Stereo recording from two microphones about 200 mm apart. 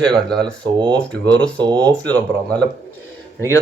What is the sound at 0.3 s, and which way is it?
Speech, 5° left (ahead or behind).